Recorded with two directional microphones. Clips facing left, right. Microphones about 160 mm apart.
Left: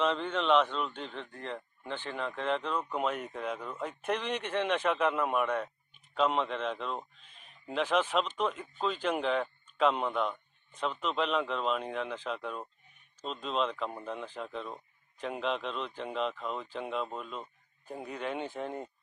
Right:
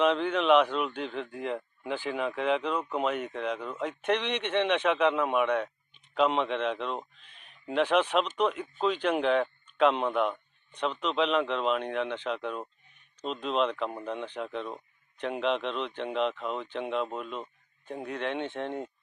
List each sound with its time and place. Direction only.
0.0 s speech: centre (ahead or behind)
17.8 s speech: 5° left (ahead or behind)